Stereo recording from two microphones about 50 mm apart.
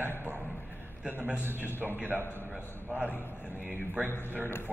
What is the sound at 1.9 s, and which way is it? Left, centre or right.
Speech, right.